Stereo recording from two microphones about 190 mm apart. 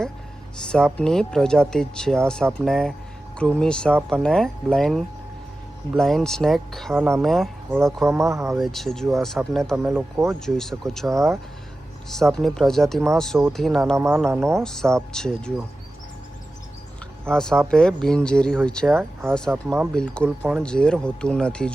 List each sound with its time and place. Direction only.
0.9 s speech: 5° left (ahead or behind)
6.9 s speech: 15° right (ahead or behind)
7.2 s speech: centre (ahead or behind)
8.0 s speech: 15° right (ahead or behind)
8.5 s speech: centre (ahead or behind)
12.1 s speech: centre (ahead or behind)
13.9 s speech: 15° right (ahead or behind)
14.6 s speech: 5° left (ahead or behind)
17.2 s speech: 5° left (ahead or behind)